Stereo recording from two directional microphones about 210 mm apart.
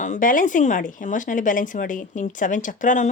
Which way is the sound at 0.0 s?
40° left (ahead or behind).